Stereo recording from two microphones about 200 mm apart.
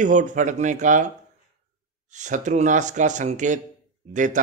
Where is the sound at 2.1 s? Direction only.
35° right (ahead or behind).